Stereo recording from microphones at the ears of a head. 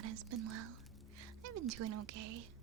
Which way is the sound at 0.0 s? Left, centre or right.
Right.